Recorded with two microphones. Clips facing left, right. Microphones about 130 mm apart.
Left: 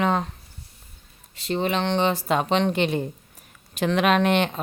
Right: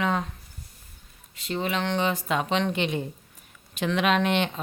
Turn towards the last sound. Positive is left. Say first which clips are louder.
# left 3 dB
turn(degrees=50)  # may be behind; listen again after turning